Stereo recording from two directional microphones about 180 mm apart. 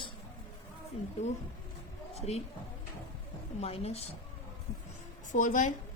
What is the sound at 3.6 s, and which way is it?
Speech, 35° left (ahead or behind).